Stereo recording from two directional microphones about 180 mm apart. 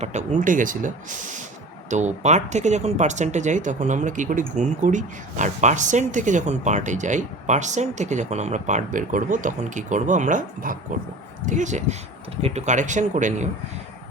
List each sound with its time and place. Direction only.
0.0 s speech: 40° right (ahead or behind)